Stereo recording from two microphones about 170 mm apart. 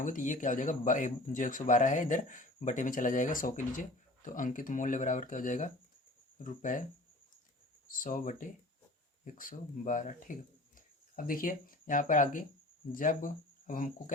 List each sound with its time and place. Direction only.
0.0 s speech: 50° left (ahead or behind)
7.9 s speech: 55° left (ahead or behind)